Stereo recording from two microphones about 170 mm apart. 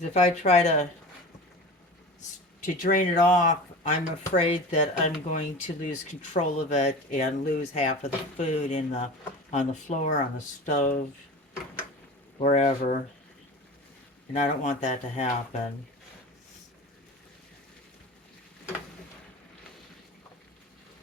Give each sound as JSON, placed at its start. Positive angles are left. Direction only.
{"t": 0.1, "sound": "speech", "side_deg": 40}
{"t": 2.7, "sound": "speech", "side_deg": 50}
{"t": 12.4, "sound": "speech", "side_deg": 45}
{"t": 14.3, "sound": "speech", "side_deg": 45}